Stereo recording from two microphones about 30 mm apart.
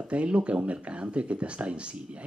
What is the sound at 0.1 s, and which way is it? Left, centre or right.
Speech, right.